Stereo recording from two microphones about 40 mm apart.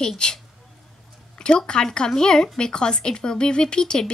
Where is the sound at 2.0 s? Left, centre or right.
Centre.